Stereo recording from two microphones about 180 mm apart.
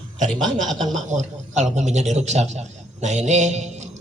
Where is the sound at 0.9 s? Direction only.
40° right (ahead or behind).